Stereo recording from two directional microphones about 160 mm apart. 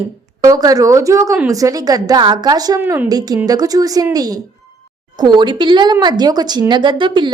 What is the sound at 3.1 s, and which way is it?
Speech, 25° right (ahead or behind).